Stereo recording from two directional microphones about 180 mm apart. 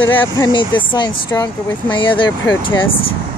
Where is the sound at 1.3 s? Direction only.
15° left (ahead or behind).